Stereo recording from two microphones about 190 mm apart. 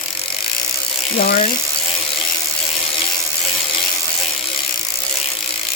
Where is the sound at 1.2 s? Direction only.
55° left (ahead or behind).